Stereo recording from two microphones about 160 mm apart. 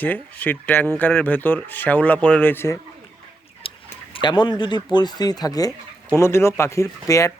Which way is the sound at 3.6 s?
35° left (ahead or behind).